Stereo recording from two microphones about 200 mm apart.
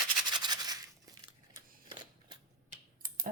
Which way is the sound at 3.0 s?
45° right (ahead or behind).